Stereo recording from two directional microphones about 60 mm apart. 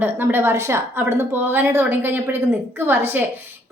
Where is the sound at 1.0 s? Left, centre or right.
Right.